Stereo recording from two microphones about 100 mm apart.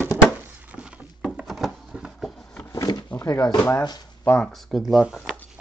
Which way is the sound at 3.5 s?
25° left (ahead or behind).